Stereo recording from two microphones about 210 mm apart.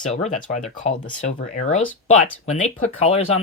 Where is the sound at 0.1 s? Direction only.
35° left (ahead or behind).